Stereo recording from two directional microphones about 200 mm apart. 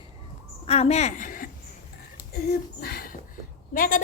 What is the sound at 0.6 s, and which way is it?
A woman's voice, 30° left (ahead or behind).